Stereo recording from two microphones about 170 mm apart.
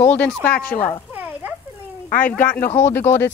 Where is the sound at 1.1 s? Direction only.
10° right (ahead or behind).